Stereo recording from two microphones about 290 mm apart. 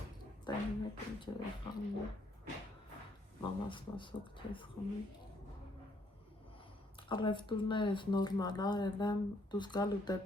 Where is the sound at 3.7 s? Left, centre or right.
Centre.